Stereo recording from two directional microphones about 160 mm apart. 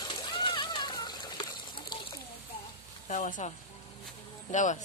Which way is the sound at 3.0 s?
50° left (ahead or behind).